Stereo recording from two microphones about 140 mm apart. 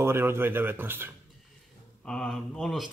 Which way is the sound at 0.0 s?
15° right (ahead or behind).